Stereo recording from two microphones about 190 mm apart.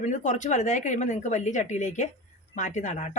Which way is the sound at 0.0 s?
40° left (ahead or behind).